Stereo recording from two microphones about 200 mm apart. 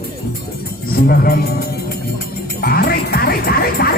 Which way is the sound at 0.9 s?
50° left (ahead or behind).